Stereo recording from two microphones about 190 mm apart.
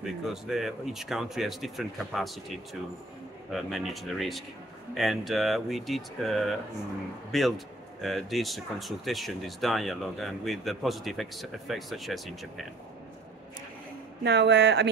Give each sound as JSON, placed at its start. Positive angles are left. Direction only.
{"t": 0.0, "sound": "speech", "side_deg": 0}
{"t": 14.2, "sound": "speech", "side_deg": -65}